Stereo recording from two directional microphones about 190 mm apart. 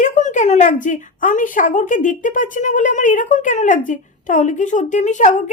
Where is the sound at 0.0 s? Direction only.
40° left (ahead or behind).